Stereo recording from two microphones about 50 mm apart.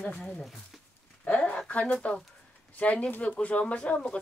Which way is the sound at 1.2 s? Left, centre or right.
Left.